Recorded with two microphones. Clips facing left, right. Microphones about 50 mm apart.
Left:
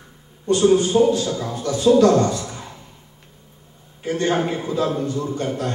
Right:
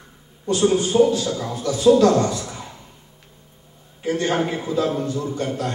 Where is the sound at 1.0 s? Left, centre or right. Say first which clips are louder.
Left 1 dB; left.